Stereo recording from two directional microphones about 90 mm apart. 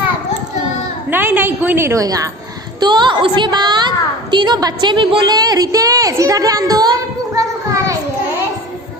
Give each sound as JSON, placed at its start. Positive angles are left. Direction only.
{"t": 1.1, "sound": "a woman's voice", "side_deg": -20}
{"t": 2.8, "sound": "a woman's voice", "side_deg": -55}